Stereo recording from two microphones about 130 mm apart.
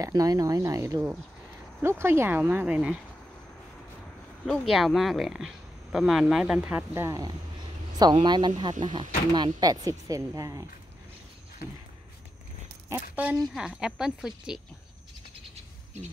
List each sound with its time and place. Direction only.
0.0 s speech: 30° right (ahead or behind); by 3.0 s 10° right (ahead or behind)
4.5 s speech: centre (ahead or behind)
6.9 s speech: 25° right (ahead or behind)
12.9 s speech: 10° right (ahead or behind)